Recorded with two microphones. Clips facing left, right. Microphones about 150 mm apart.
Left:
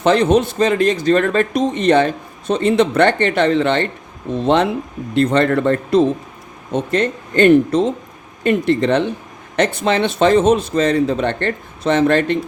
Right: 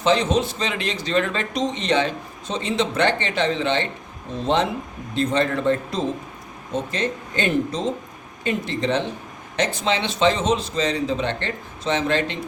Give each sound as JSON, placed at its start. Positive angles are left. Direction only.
{"t": 0.0, "sound": "speech", "side_deg": 55}